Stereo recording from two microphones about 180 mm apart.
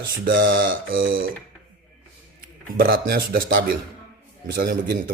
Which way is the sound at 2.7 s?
50° right (ahead or behind).